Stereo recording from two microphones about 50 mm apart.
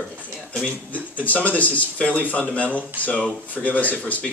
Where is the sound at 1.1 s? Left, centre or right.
Left.